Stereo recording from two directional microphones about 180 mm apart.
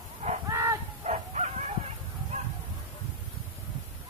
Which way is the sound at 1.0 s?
40° right (ahead or behind).